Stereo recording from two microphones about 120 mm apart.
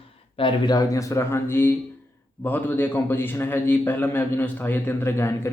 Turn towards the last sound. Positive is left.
turn(degrees=20)  # may be behind; listen again after turning